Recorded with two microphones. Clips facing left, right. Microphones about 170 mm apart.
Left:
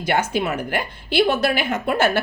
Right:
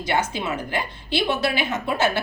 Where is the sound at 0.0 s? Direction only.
50° left (ahead or behind).